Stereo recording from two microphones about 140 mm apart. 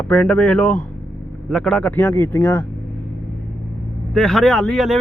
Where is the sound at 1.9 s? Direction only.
20° left (ahead or behind).